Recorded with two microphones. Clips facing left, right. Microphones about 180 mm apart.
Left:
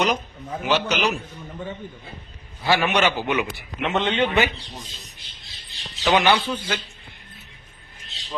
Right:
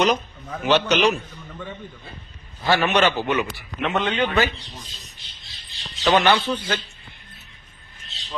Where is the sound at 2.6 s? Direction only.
10° left (ahead or behind).